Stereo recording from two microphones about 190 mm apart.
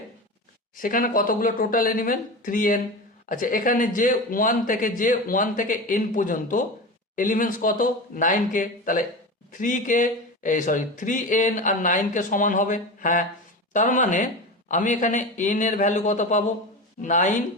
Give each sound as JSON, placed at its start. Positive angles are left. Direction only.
{"t": 0.8, "sound": "speech", "side_deg": 45}